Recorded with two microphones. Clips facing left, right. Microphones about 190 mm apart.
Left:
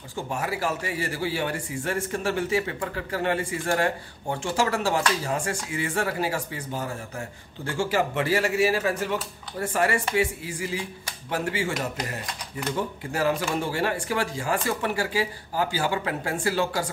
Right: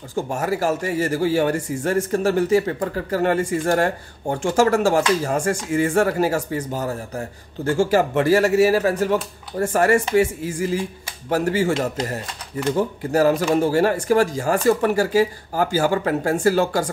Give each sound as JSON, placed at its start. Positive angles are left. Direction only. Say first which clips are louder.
{"t": 0.1, "sound": "speech", "louder": "right 7 dB", "side_deg": -45}
{"t": 12.7, "sound": "speech", "louder": "right 10 dB", "side_deg": -40}